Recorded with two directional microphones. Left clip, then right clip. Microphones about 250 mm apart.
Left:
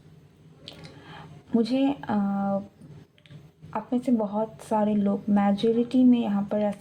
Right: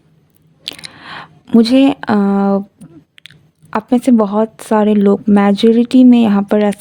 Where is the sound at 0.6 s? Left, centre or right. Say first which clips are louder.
Right 17 dB; right.